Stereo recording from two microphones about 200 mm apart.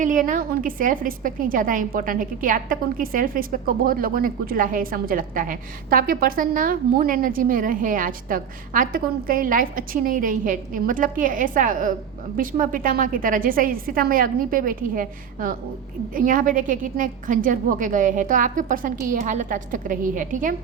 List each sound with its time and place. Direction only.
0.0 s a woman's voice: 40° right (ahead or behind)